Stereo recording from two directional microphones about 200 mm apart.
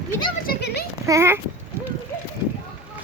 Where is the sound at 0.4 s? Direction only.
55° left (ahead or behind).